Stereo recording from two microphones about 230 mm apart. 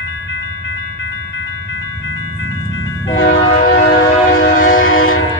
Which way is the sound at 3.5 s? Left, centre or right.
Left.